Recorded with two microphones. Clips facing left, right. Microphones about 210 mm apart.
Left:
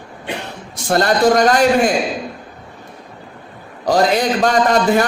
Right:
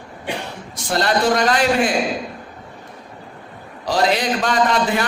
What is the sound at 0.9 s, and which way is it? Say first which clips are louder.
A man's voice: left 5 dB; 45° left (ahead or behind).